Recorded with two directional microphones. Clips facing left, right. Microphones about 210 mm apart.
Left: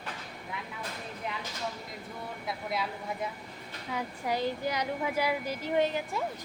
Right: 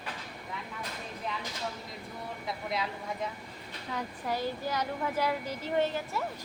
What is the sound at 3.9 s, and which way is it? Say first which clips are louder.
A woman's voice: left 2 dB; 15° left (ahead or behind).